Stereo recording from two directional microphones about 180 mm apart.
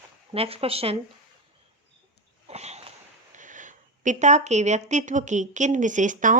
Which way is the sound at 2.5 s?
35° right (ahead or behind).